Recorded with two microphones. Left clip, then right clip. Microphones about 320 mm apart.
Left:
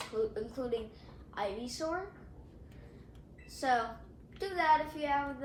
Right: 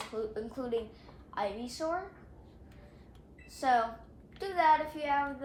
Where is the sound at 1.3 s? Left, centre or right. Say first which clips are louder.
Right 2 dB; right.